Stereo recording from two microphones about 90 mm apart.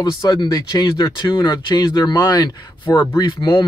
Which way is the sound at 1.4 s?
60° left (ahead or behind).